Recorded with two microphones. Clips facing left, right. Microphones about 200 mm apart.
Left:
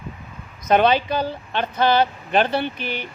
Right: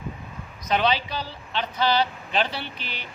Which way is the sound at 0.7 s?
50° left (ahead or behind).